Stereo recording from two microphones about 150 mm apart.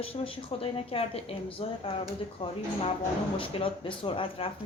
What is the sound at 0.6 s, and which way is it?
Speech, 40° left (ahead or behind).